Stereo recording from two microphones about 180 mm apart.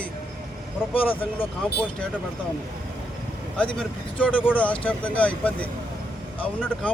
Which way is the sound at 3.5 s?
5° left (ahead or behind).